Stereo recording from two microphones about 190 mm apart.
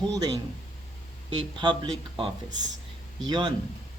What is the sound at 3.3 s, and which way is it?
Speech, 25° right (ahead or behind).